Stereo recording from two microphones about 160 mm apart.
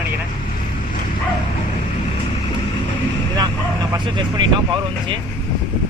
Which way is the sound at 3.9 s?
30° right (ahead or behind).